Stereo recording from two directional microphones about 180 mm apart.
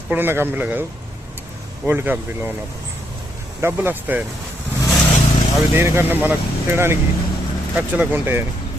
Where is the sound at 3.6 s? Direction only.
10° right (ahead or behind).